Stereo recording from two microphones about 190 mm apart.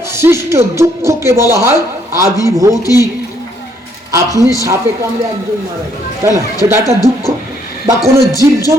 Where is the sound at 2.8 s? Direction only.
15° left (ahead or behind).